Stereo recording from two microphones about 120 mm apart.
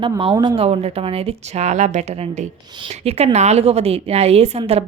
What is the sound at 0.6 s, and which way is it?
A woman's voice, 55° right (ahead or behind).